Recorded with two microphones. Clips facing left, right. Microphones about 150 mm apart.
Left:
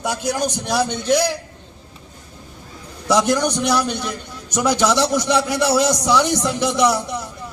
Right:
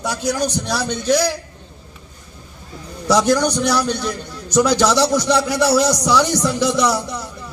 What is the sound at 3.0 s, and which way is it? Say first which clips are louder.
A man's voice: right 2 dB; 20° left (ahead or behind).